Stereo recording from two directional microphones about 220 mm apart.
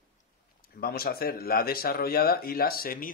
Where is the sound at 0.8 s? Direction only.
45° left (ahead or behind).